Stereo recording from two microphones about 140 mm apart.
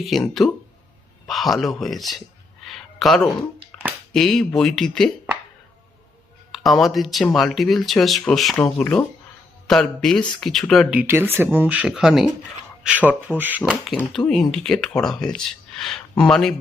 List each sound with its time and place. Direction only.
0.0 s speech: centre (ahead or behind)
2.6 s a sound: centre (ahead or behind)
4.1 s speech: 5° left (ahead or behind)
6.5 s speech: centre (ahead or behind)
8.5 s speech: 15° left (ahead or behind)
10.9 s speech: 15° right (ahead or behind)
13.6 s speech: 15° left (ahead or behind)
14.3 s speech: 5° left (ahead or behind)